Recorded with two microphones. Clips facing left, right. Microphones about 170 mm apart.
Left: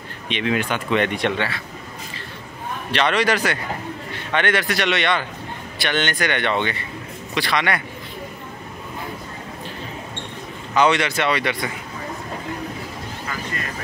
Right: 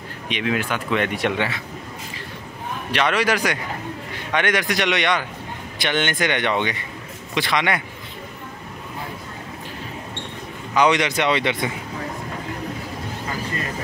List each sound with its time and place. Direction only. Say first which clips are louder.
0.3 s speech: left 1 dB; 5° right (ahead or behind)
2.9 s speech: left 1 dB; 10° right (ahead or behind)
10.7 s speech: even; 15° right (ahead or behind)